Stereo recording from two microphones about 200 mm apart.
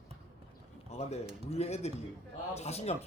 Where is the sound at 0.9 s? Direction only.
35° left (ahead or behind).